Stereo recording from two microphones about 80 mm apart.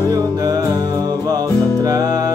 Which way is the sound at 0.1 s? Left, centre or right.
Right.